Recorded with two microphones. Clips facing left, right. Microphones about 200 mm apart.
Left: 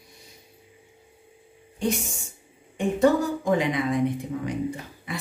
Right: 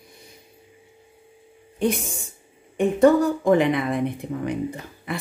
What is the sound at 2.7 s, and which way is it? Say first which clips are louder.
Speech: right 4 dB; 55° right (ahead or behind).